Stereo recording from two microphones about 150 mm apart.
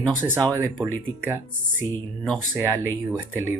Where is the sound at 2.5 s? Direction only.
20° right (ahead or behind).